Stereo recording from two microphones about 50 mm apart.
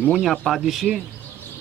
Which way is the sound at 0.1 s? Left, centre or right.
Centre.